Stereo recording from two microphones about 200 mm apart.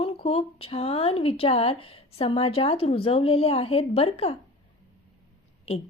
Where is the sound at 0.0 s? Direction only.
30° left (ahead or behind).